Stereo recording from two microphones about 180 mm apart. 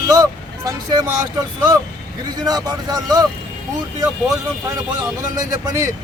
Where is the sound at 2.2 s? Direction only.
20° right (ahead or behind).